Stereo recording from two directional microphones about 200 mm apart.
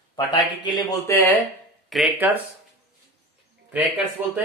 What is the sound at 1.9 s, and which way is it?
Speech, 5° right (ahead or behind).